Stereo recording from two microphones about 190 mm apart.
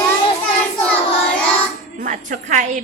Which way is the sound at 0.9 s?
5° left (ahead or behind).